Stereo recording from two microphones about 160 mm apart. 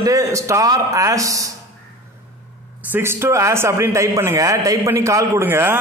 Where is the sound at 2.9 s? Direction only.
15° right (ahead or behind).